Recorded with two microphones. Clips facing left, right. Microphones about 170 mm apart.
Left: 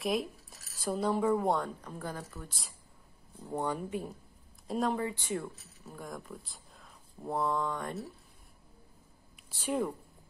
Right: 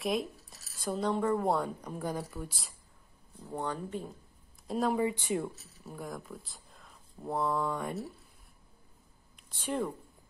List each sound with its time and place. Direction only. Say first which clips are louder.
0.0 s speech: even; centre (ahead or behind)
1.8 s speech: right 4 dB; 15° right (ahead or behind)
3.4 s speech: left 2 dB; 15° left (ahead or behind)
4.6 s speech: right 1 dB; centre (ahead or behind)
4.9 s speech: right 4 dB; 15° right (ahead or behind)
5.9 s speech: right 2 dB; centre (ahead or behind)
9.5 s speech: left 1 dB; 5° left (ahead or behind)